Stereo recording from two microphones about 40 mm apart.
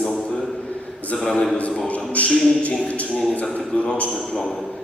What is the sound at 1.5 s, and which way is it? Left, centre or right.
A man's voice, left.